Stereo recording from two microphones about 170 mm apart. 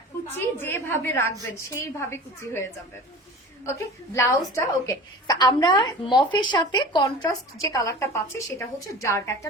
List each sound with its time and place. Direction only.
0.3 s a woman's voice: 15° left (ahead or behind)
3.7 s a woman's voice: 15° left (ahead or behind)